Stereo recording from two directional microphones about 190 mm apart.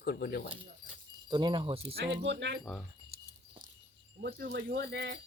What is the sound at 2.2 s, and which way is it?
Speech, 65° right (ahead or behind).